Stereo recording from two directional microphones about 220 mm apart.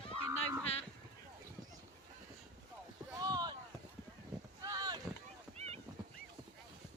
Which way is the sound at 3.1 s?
15° right (ahead or behind).